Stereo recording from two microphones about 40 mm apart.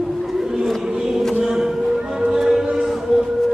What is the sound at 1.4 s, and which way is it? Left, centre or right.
Music, centre.